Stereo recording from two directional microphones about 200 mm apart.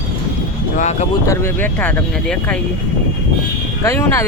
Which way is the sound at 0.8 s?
35° left (ahead or behind).